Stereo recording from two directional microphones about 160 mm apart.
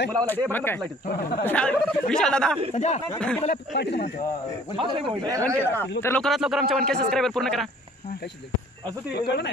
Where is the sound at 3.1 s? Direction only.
10° left (ahead or behind).